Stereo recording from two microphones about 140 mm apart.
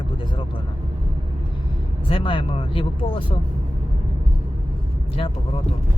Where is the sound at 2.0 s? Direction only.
40° left (ahead or behind).